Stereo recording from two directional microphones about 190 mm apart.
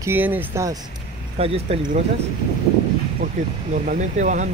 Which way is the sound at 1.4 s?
30° right (ahead or behind).